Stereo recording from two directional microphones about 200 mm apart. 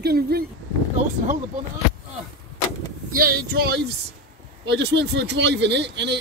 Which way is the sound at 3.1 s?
45° right (ahead or behind).